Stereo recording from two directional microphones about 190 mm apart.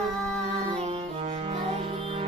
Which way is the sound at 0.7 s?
30° right (ahead or behind).